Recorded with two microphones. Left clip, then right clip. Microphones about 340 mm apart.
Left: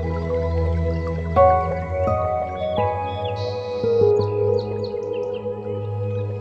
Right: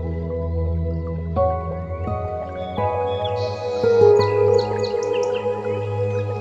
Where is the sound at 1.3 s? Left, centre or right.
Left.